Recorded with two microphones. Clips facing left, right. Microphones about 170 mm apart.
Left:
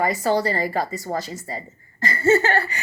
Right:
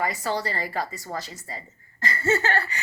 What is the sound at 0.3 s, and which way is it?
A woman's voice, 45° left (ahead or behind).